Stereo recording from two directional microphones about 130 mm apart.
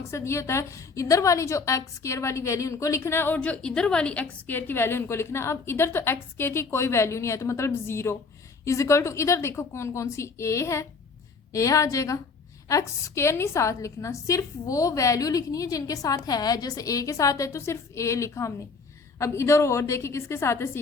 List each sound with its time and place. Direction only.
0.1 s a woman's voice: 20° left (ahead or behind)